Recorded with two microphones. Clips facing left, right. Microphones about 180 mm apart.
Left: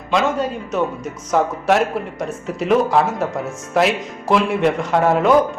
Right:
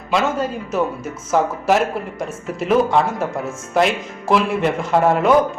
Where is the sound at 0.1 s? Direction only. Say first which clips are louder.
Left 1 dB; centre (ahead or behind).